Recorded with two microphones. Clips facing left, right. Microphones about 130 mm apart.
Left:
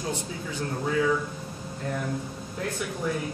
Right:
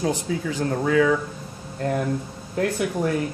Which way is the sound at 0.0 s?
90° right.